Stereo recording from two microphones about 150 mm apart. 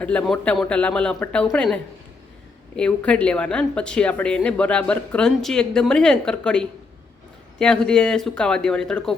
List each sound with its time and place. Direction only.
0.0 s speech: 10° left (ahead or behind)